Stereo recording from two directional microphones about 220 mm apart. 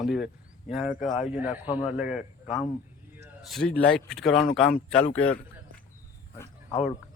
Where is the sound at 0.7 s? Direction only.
5° right (ahead or behind).